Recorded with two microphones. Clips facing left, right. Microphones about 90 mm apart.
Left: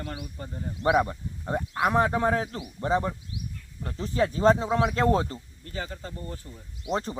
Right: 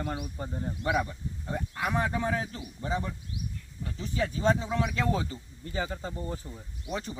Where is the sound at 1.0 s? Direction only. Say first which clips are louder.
Left 6 dB; 45° left (ahead or behind).